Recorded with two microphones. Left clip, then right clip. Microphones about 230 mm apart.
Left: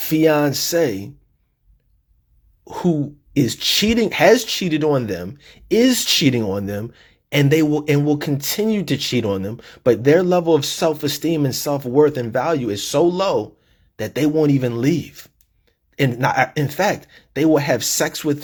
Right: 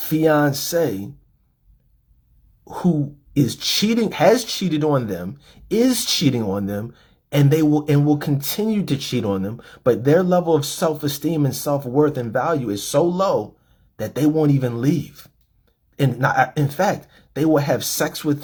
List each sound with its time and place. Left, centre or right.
0.2 s speech: left
3.8 s speech: left